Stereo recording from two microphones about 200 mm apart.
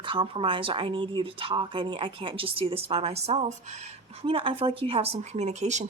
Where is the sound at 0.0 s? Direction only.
25° right (ahead or behind).